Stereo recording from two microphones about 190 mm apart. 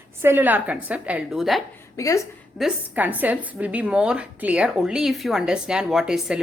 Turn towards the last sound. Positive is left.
turn(degrees=-5)  # may be behind; listen again after turning